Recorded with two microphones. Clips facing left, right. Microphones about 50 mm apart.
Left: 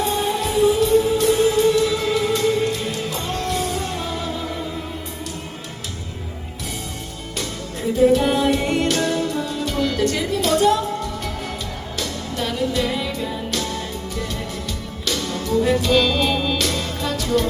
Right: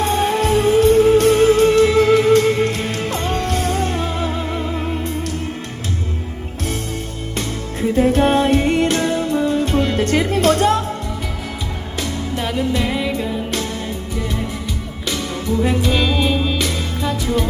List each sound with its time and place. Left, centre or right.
0.0 s music: right
7.3 s music: right
11.9 s music: right
15.0 s music: right